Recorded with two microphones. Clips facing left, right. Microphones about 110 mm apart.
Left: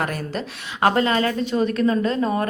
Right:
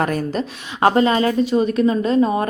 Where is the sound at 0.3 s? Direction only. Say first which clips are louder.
Right 4 dB; 25° right (ahead or behind).